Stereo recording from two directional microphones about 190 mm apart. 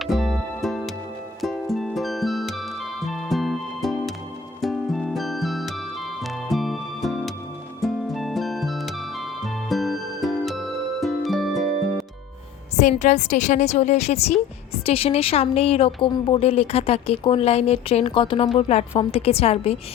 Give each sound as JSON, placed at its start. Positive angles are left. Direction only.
{"t": 0.0, "sound": "music", "side_deg": 0}
{"t": 12.7, "sound": "speech", "side_deg": 35}